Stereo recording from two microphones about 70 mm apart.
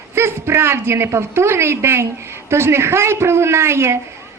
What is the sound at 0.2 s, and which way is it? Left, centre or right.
A woman's voice, right.